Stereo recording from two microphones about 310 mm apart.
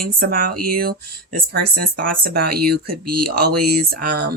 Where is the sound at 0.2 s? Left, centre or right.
Right.